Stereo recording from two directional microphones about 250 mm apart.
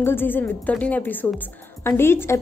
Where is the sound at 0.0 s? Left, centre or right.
Centre.